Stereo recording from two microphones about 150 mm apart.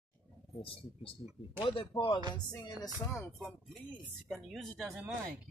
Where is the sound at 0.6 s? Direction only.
40° left (ahead or behind); by 3.5 s 20° left (ahead or behind).